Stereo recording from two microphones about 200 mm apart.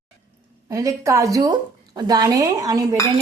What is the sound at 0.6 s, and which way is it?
A woman's voice, 15° right (ahead or behind).